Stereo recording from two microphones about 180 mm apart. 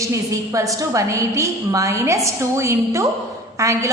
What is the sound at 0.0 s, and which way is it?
A woman's voice, 15° right (ahead or behind).